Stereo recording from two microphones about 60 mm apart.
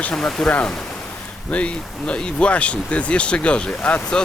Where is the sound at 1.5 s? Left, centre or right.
Centre.